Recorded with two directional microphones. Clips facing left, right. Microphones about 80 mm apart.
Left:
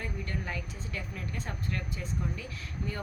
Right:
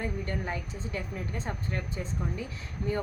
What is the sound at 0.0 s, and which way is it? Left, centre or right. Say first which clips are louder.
Speech: right 4 dB; right.